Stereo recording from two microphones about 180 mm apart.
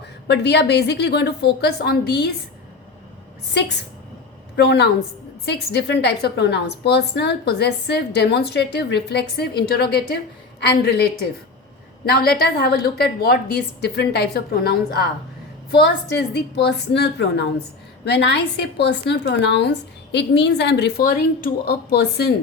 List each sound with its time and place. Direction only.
0.3 s a woman's voice: 70° left (ahead or behind)
4.5 s a woman's voice: 70° left (ahead or behind)